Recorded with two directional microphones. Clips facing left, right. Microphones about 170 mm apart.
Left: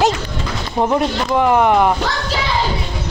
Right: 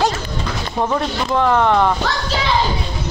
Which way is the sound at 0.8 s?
15° left (ahead or behind).